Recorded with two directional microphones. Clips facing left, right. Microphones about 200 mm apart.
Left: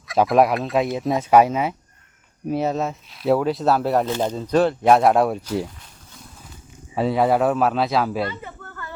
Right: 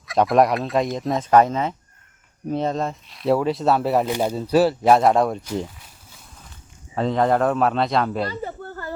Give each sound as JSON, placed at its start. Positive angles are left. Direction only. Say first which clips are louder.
{"t": 0.1, "sound": "speech", "louder": "even", "side_deg": 0}
{"t": 4.0, "sound": "speech", "louder": "right 1 dB", "side_deg": -10}
{"t": 6.9, "sound": "speech", "louder": "left 1 dB", "side_deg": 10}
{"t": 8.3, "sound": "a sound", "louder": "right 5 dB", "side_deg": -35}